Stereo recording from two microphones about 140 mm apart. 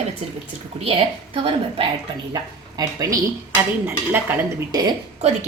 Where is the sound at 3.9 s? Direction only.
15° right (ahead or behind).